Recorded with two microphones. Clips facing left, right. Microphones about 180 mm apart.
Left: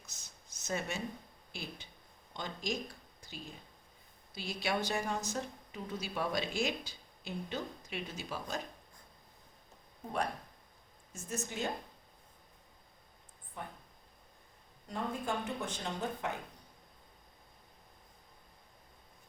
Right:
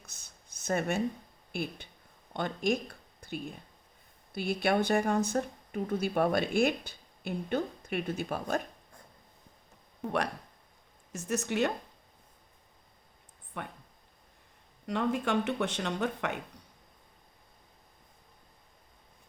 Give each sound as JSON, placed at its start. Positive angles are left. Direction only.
{"t": 0.0, "sound": "a sound", "side_deg": -55}
{"t": 1.5, "sound": "speech", "side_deg": -55}
{"t": 10.0, "sound": "speech", "side_deg": -80}
{"t": 13.5, "sound": "speech", "side_deg": -70}
{"t": 14.8, "sound": "speech", "side_deg": -80}